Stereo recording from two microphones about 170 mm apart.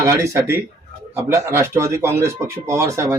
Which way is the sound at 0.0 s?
15° right (ahead or behind).